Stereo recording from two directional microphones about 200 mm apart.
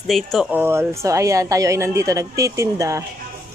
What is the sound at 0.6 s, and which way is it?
A woman's voice, 10° right (ahead or behind).